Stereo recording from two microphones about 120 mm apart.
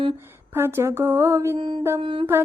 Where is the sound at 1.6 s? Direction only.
45° right (ahead or behind).